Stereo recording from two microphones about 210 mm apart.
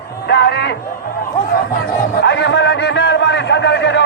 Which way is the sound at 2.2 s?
55° left (ahead or behind).